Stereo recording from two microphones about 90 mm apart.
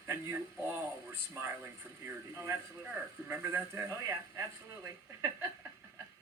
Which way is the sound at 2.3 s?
30° right (ahead or behind).